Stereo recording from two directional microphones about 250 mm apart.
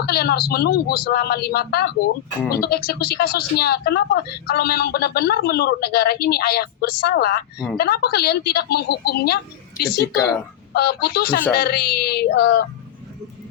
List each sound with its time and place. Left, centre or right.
0.0 s speech: left